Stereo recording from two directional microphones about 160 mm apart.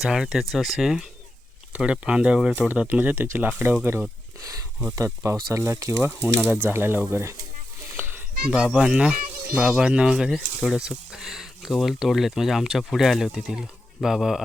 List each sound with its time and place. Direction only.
0.0 s speech: 5° right (ahead or behind)